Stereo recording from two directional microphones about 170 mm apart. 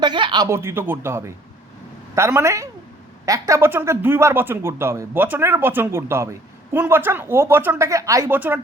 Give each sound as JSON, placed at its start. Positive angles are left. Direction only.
{"t": 0.0, "sound": "speech", "side_deg": -25}
{"t": 0.4, "sound": "speech", "side_deg": -15}